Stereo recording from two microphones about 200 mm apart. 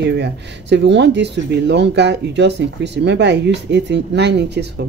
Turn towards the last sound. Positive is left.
turn(degrees=-55)  # may be behind; listen again after turning